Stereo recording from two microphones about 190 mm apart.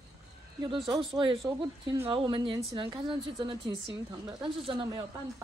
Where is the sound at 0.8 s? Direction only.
25° right (ahead or behind).